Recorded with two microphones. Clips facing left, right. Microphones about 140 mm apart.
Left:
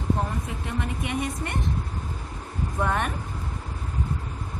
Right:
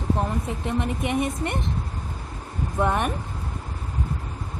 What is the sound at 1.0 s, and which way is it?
Speech, 20° right (ahead or behind).